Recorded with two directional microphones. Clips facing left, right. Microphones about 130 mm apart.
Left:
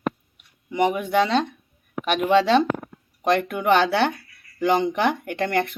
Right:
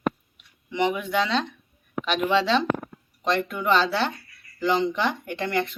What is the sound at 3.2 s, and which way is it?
Speech, 60° left (ahead or behind).